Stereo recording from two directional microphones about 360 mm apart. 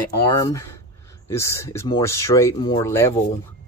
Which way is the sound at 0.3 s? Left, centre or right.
Centre.